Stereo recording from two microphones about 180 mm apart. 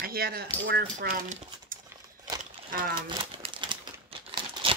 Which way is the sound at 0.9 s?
40° right (ahead or behind).